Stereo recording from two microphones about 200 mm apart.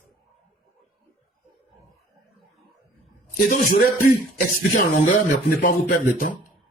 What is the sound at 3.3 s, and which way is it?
Speech, 50° left (ahead or behind).